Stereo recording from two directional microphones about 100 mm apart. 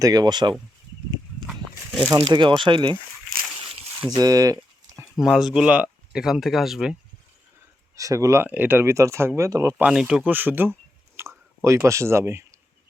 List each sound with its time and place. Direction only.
0.0 s speech: 40° right (ahead or behind)
2.1 s speech: 45° right (ahead or behind)
4.1 s a sound: 40° right (ahead or behind)
5.2 s speech: 5° right (ahead or behind)
7.9 s speech: 35° right (ahead or behind)
8.4 s speech: 20° right (ahead or behind)
9.7 s speech: 10° right (ahead or behind); by 12.5 s 25° right (ahead or behind)